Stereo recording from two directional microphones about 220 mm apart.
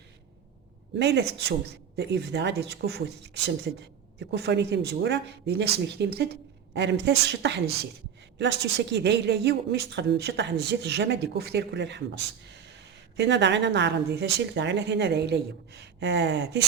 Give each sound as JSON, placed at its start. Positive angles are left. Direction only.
{"t": 0.9, "sound": "a woman's voice", "side_deg": -50}
{"t": 12.5, "sound": "a sound", "side_deg": -50}
{"t": 13.1, "sound": "a woman's voice", "side_deg": -50}